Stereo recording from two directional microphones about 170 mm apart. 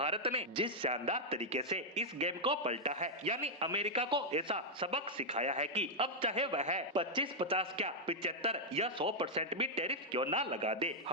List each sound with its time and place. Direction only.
0.0 s a man's voice: 35° right (ahead or behind)
5.3 s a man's voice: 45° right (ahead or behind)
6.9 s a man's voice: 30° right (ahead or behind)